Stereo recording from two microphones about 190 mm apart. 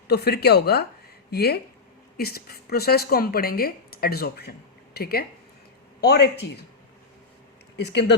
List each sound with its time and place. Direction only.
0.1 s speech: 55° left (ahead or behind)
7.8 s speech: 60° left (ahead or behind)